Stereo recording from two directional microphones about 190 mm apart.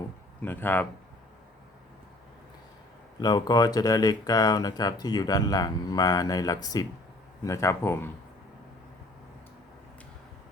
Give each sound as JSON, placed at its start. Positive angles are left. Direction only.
{"t": 0.4, "sound": "speech", "side_deg": 10}
{"t": 3.2, "sound": "speech", "side_deg": 20}